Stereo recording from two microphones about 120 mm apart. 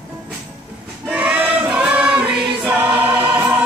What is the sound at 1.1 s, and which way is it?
Choir, 10° right (ahead or behind).